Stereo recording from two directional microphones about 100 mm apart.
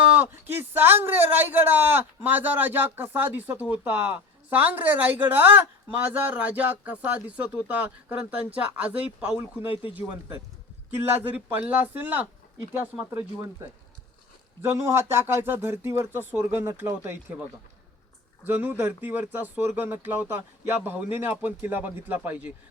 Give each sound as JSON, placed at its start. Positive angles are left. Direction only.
{"t": 0.0, "sound": "a man's voice", "side_deg": -15}
{"t": 18.4, "sound": "a man's voice", "side_deg": -20}